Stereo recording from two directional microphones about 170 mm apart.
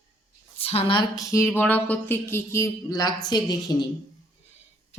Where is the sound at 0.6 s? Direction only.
35° left (ahead or behind).